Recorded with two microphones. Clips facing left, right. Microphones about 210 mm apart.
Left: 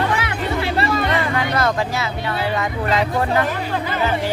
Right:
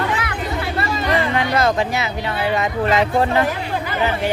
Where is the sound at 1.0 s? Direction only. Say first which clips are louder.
Right 1 dB; 20° right (ahead or behind).